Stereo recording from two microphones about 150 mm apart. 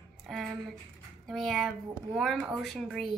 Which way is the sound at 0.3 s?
Centre (ahead or behind).